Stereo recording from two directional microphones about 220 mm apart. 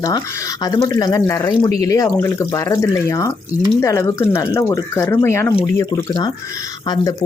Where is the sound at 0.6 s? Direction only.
15° left (ahead or behind).